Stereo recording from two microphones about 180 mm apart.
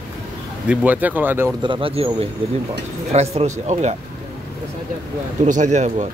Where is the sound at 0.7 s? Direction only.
10° right (ahead or behind).